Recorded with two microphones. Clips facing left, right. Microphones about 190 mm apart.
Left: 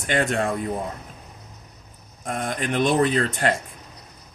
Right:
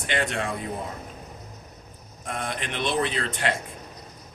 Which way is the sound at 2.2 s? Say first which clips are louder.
Left 5 dB; 45° left (ahead or behind).